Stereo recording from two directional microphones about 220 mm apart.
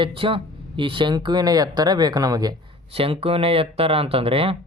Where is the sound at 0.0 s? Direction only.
25° right (ahead or behind).